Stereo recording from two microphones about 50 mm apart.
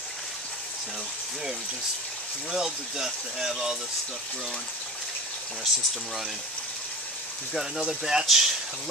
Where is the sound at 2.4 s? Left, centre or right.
Centre.